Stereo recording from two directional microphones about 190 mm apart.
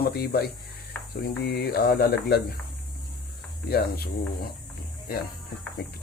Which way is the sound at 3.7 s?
55° left (ahead or behind).